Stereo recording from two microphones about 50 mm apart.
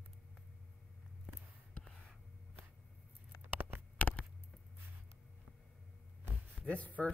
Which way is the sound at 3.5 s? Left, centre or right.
Right.